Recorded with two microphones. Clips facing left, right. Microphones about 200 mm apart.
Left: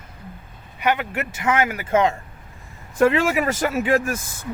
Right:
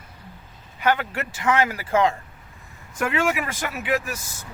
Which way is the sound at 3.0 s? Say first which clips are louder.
Left 6 dB; 35° left (ahead or behind).